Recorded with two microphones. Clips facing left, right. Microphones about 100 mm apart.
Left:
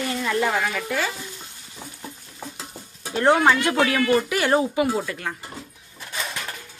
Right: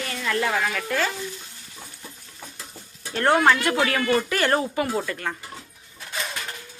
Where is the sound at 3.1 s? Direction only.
15° left (ahead or behind).